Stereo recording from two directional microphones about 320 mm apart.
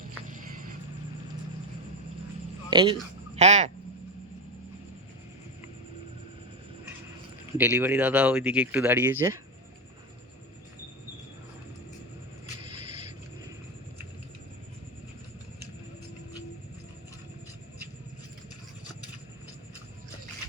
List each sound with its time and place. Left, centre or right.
0.3 s a sound: right
2.6 s speech: centre
7.6 s speech: centre